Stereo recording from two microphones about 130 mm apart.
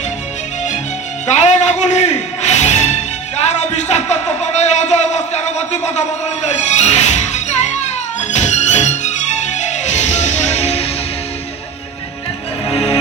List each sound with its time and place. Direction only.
1.3 s music: 65° left (ahead or behind)
3.5 s a man's voice: 60° left (ahead or behind)
8.3 s music: 65° left (ahead or behind)
12.7 s music: 50° left (ahead or behind)